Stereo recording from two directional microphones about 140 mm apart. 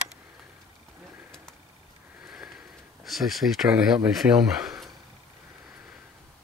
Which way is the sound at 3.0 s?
Centre (ahead or behind).